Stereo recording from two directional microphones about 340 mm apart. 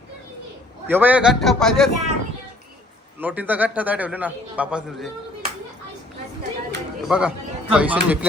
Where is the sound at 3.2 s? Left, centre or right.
Centre.